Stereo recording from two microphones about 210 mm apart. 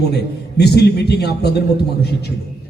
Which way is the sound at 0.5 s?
50° left (ahead or behind).